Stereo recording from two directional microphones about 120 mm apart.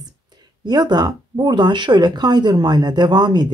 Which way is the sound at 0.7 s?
35° right (ahead or behind).